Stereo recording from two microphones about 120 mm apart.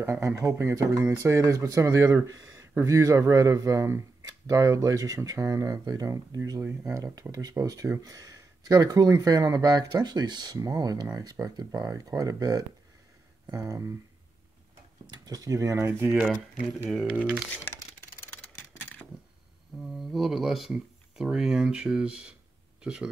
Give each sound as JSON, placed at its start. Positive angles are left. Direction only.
{"t": 0.0, "sound": "speech", "side_deg": -25}
{"t": 15.2, "sound": "speech", "side_deg": -30}
{"t": 17.2, "sound": "speech", "side_deg": -10}
{"t": 17.5, "sound": "speech", "side_deg": 20}
{"t": 18.3, "sound": "a sound", "side_deg": 10}
{"t": 19.8, "sound": "speech", "side_deg": 0}